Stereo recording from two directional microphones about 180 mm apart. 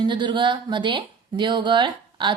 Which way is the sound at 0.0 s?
25° right (ahead or behind).